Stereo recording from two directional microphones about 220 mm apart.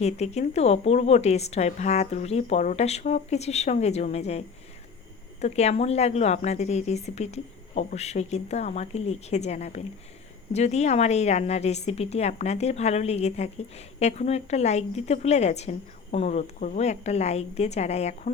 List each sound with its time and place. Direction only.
0.0 s a woman's voice: 30° left (ahead or behind)